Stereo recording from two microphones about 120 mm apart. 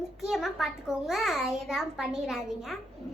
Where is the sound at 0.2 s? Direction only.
Centre (ahead or behind).